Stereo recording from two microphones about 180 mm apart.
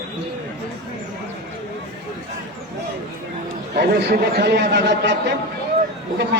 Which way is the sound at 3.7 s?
65° right (ahead or behind).